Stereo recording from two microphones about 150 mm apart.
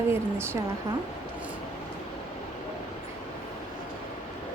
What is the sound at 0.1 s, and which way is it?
Speech, 15° right (ahead or behind).